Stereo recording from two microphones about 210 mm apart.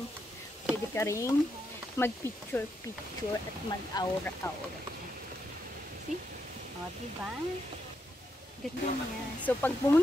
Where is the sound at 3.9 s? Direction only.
15° left (ahead or behind).